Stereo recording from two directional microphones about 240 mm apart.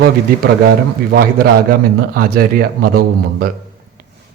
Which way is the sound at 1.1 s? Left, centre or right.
Right.